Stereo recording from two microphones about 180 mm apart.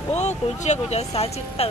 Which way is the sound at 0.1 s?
40° left (ahead or behind).